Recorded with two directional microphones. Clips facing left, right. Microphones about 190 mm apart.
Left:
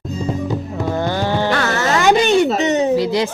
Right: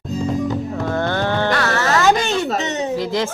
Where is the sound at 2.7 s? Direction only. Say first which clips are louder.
Left 6 dB; 15° left (ahead or behind).